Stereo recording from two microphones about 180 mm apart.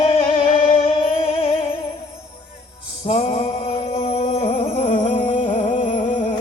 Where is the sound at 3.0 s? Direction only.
30° left (ahead or behind).